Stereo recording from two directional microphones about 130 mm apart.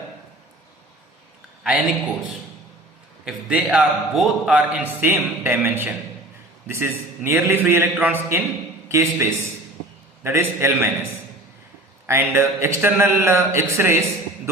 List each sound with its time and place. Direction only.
1.6 s a man's voice: 5° right (ahead or behind)
3.2 s a man's voice: 5° right (ahead or behind)
12.0 s speech: 20° right (ahead or behind)